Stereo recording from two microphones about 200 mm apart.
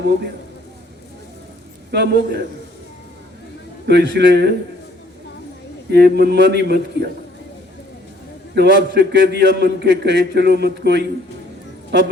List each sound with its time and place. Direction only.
1.9 s a man's voice: 60° right (ahead or behind)
3.8 s a man's voice: 60° right (ahead or behind)
5.9 s a man's voice: 55° right (ahead or behind)
8.5 s a man's voice: 60° right (ahead or behind)